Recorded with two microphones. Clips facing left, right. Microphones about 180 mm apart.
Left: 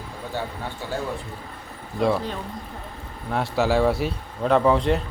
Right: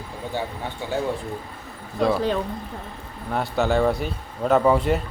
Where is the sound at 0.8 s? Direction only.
15° right (ahead or behind).